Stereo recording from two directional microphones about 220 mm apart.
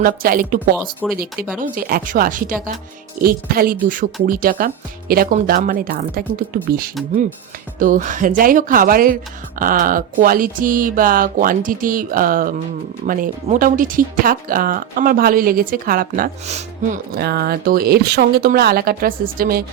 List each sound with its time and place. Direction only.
0.0 s speech: 40° right (ahead or behind)
17.2 s speech: 45° right (ahead or behind)